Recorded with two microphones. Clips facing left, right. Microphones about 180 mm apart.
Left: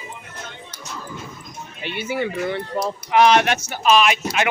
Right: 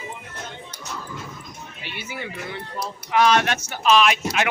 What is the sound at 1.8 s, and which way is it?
Speech, 55° left (ahead or behind).